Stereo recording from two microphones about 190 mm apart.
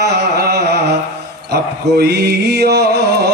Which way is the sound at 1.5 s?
55° right (ahead or behind).